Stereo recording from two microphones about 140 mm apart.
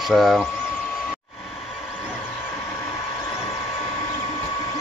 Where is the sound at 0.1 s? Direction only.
Centre (ahead or behind).